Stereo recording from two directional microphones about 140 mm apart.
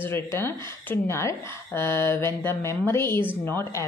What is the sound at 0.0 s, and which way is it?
A woman's voice, 15° left (ahead or behind).